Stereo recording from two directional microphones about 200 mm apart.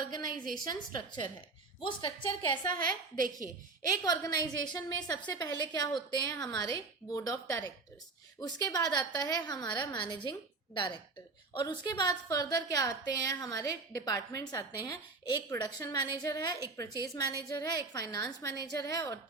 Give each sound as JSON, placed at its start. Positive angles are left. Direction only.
{"t": 0.0, "sound": "a sound", "side_deg": 20}
{"t": 0.5, "sound": "a woman's voice", "side_deg": 20}
{"t": 2.7, "sound": "a woman's voice", "side_deg": -45}
{"t": 3.3, "sound": "a woman's voice", "side_deg": 20}
{"t": 18.5, "sound": "a woman's voice", "side_deg": -55}
{"t": 18.9, "sound": "a woman's voice", "side_deg": 20}